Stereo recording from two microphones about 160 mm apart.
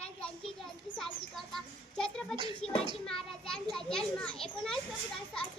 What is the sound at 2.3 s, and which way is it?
A child's voice, 5° left (ahead or behind).